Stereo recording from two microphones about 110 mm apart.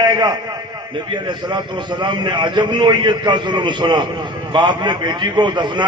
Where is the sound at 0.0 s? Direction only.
40° right (ahead or behind).